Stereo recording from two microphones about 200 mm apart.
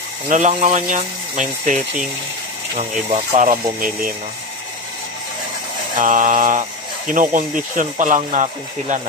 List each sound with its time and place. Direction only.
0.3 s speech: 35° right (ahead or behind)
5.9 s speech: 40° right (ahead or behind)